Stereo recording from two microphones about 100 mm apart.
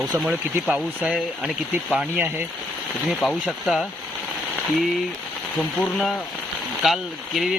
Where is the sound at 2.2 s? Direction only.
20° right (ahead or behind).